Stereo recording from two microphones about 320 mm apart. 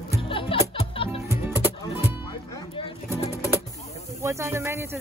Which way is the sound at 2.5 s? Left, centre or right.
Centre.